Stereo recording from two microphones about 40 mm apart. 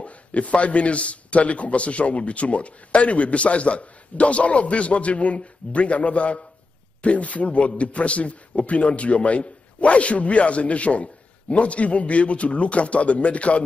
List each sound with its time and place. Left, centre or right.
0.0 s a man's voice: left